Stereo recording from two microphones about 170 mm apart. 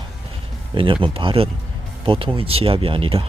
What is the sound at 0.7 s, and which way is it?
Speech, 30° right (ahead or behind).